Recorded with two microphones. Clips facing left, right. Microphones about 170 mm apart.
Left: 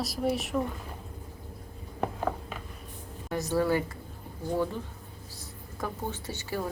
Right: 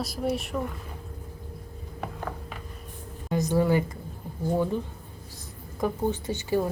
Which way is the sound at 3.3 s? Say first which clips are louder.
Right 3 dB; 15° right (ahead or behind).